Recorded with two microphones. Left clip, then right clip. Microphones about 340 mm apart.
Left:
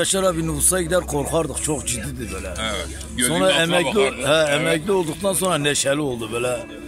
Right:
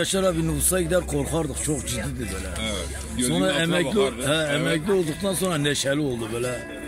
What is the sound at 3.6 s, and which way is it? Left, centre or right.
Speech, left.